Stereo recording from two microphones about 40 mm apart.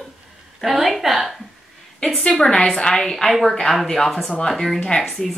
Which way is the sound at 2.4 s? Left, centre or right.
Centre.